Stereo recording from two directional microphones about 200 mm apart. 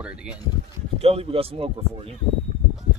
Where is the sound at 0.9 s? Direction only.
30° right (ahead or behind).